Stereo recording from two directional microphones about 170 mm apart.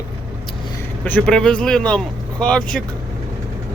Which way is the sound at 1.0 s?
10° left (ahead or behind).